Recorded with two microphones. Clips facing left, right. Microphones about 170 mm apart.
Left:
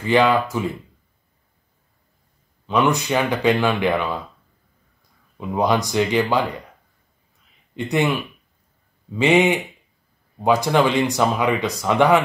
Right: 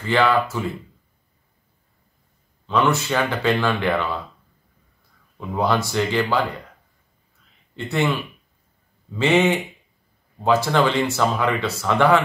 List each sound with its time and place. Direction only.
0.0 s speech: 15° left (ahead or behind)
2.6 s speech: 15° left (ahead or behind)
5.4 s speech: 15° left (ahead or behind)
7.7 s speech: 15° left (ahead or behind)